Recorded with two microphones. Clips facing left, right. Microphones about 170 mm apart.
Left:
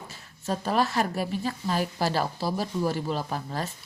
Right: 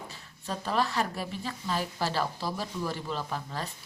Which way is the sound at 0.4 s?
40° left (ahead or behind).